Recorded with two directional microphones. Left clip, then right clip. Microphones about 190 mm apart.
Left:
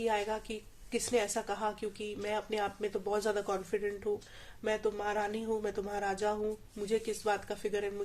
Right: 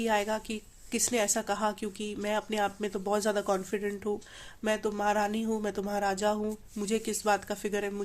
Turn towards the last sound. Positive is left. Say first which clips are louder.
# right 3 dB
turn(degrees=-45)  # may be behind; listen again after turning